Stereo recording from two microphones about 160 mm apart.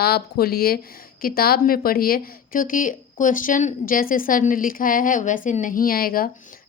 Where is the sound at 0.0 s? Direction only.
75° left (ahead or behind).